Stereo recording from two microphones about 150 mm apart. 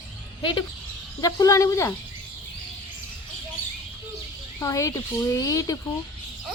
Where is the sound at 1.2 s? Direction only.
25° left (ahead or behind).